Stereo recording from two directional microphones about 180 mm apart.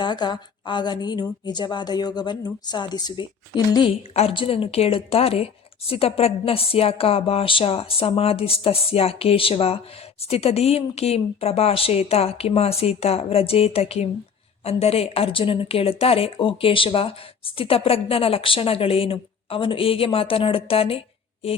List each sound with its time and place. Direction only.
0.0 s a woman's voice: 25° left (ahead or behind)